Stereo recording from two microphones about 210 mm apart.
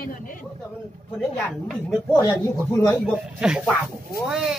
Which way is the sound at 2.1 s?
15° left (ahead or behind).